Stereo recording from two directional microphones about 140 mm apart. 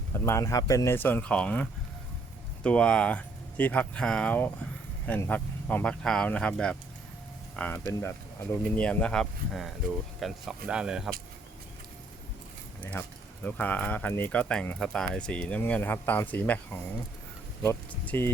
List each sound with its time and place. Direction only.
0.1 s speech: 20° left (ahead or behind)
2.6 s speech: 5° left (ahead or behind)
12.8 s speech: 10° left (ahead or behind)
17.6 s speech: 15° left (ahead or behind)